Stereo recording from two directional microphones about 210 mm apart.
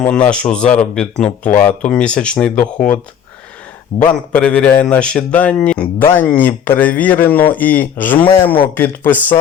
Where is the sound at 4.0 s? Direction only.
5° left (ahead or behind).